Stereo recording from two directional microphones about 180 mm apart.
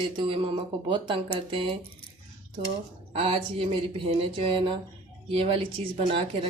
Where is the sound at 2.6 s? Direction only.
40° right (ahead or behind).